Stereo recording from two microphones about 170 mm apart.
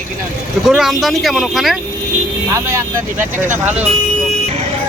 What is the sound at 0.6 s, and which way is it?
Speech, centre (ahead or behind).